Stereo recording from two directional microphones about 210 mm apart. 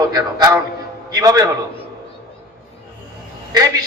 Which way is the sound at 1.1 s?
20° right (ahead or behind).